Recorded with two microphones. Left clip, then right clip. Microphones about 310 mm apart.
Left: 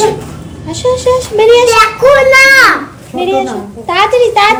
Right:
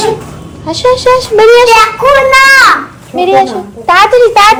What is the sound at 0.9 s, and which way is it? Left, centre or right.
Speech, right.